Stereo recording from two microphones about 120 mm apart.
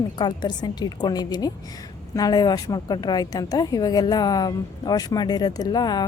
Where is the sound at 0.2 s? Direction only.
40° left (ahead or behind).